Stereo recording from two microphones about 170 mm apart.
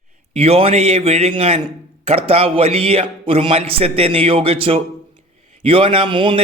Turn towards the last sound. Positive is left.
turn(degrees=-30)  # may be behind; listen again after turning